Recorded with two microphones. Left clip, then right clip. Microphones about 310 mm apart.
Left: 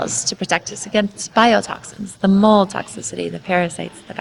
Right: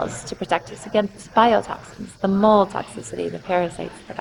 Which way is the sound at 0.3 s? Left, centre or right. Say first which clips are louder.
Right 1 dB; left.